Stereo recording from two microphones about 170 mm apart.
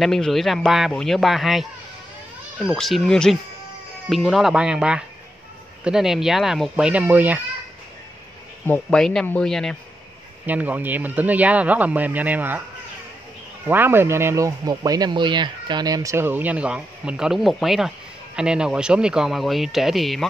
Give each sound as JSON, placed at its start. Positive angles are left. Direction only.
{"t": 0.0, "sound": "speech", "side_deg": 0}
{"t": 8.6, "sound": "speech", "side_deg": 5}
{"t": 10.4, "sound": "speech", "side_deg": -10}
{"t": 13.7, "sound": "speech", "side_deg": -10}